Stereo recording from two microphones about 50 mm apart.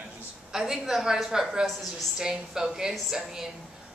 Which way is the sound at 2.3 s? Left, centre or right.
Centre.